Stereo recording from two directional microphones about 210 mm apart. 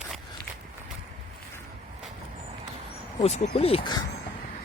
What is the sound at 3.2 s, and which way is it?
Speech, 30° left (ahead or behind).